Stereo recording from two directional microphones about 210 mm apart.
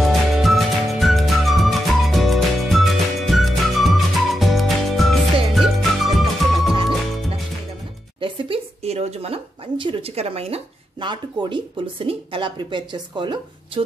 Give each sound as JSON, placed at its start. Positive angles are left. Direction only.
{"t": 0.0, "sound": "music", "side_deg": 0}
{"t": 8.2, "sound": "speech", "side_deg": -30}